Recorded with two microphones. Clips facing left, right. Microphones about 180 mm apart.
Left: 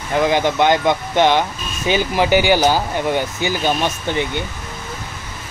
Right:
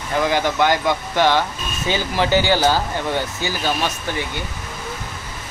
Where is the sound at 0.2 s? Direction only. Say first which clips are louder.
Left 3 dB; 20° left (ahead or behind).